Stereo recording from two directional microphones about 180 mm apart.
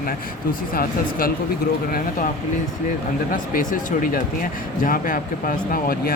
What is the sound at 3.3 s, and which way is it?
Speech, 50° left (ahead or behind).